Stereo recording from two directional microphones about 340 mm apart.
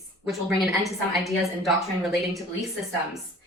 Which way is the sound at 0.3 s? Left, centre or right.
Centre.